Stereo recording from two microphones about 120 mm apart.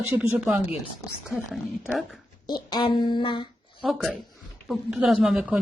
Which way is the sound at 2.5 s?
35° left (ahead or behind).